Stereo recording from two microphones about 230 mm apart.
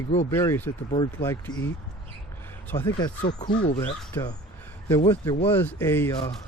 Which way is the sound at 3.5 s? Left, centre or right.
Left.